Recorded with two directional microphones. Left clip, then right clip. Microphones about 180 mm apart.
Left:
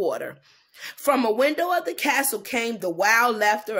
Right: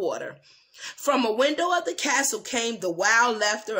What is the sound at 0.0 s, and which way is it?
Speech, 25° left (ahead or behind).